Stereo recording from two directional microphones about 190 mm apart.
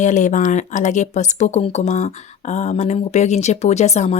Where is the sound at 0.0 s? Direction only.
40° left (ahead or behind).